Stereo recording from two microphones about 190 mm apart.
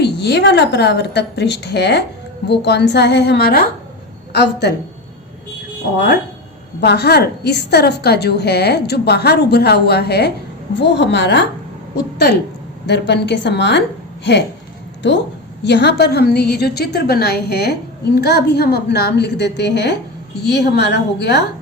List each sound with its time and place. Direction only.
0.0 s a woman's voice: 60° left (ahead or behind)
6.8 s a woman's voice: 60° left (ahead or behind)
12.8 s a woman's voice: 65° left (ahead or behind)
15.0 s a woman's voice: 70° left (ahead or behind)